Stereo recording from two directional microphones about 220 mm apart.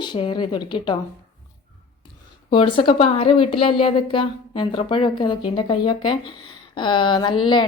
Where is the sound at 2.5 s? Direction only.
25° left (ahead or behind).